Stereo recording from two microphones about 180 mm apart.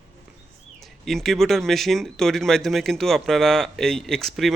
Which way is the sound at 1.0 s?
Centre (ahead or behind).